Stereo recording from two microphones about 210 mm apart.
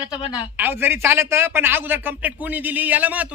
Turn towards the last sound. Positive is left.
turn(degrees=-5)  # may be behind; listen again after turning